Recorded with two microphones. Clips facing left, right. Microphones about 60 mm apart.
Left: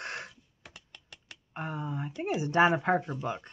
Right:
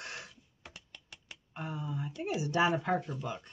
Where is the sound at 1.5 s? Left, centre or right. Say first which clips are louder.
Left 3 dB; left.